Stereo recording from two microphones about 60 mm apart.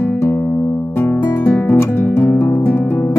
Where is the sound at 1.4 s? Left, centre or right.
Left.